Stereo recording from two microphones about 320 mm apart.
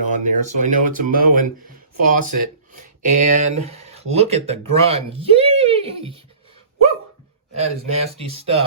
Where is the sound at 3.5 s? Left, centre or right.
Centre.